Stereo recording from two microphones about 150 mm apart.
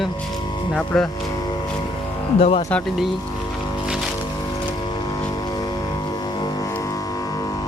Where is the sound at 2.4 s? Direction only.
50° left (ahead or behind).